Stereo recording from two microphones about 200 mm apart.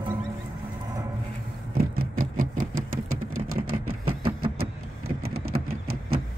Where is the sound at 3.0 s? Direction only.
90° right.